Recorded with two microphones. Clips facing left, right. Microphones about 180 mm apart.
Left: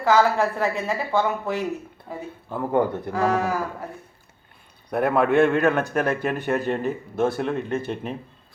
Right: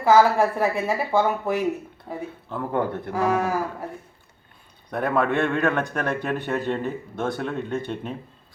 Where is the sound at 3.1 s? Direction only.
15° right (ahead or behind).